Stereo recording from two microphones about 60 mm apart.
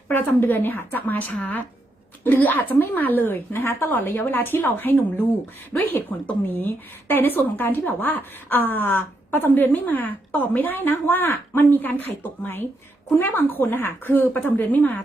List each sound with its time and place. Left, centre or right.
0.1 s a woman's voice: left